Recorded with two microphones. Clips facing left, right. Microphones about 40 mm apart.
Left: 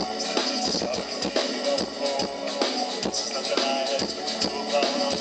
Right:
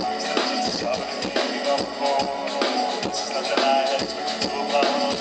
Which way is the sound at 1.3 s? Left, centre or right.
Centre.